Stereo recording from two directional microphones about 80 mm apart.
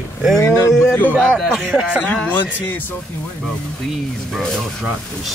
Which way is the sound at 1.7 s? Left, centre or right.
Centre.